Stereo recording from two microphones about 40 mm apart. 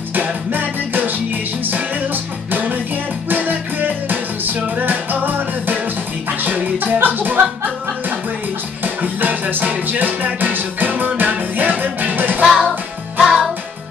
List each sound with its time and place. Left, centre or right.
0.1 s music: right
8.8 s music: right
13.2 s music: centre